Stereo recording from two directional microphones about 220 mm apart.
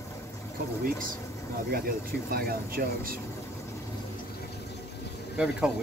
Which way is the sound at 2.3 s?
40° right (ahead or behind).